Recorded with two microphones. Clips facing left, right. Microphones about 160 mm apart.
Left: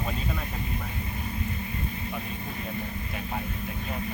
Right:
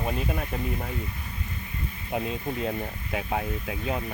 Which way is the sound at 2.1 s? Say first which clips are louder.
Right 6 dB; 90° right.